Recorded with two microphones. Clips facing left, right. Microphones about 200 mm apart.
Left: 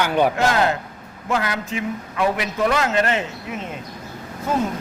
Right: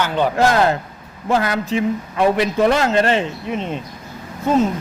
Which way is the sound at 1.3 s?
35° right (ahead or behind).